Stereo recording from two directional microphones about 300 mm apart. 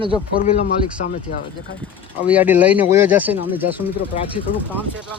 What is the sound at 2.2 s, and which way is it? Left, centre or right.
Speech, centre.